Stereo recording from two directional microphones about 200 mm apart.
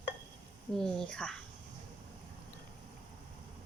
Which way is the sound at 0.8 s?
5° left (ahead or behind).